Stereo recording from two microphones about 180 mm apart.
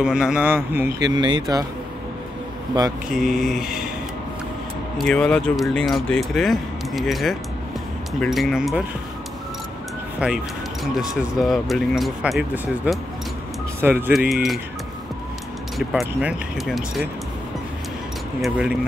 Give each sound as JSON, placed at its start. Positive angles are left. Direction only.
{"t": 0.0, "sound": "a man's voice", "side_deg": -5}
{"t": 1.0, "sound": "speech", "side_deg": -25}
{"t": 3.1, "sound": "speech", "side_deg": 0}
{"t": 4.9, "sound": "speech", "side_deg": 5}
{"t": 10.2, "sound": "speech", "side_deg": -5}
{"t": 14.3, "sound": "speech", "side_deg": 0}
{"t": 15.8, "sound": "speech", "side_deg": -5}
{"t": 18.4, "sound": "speech", "side_deg": -5}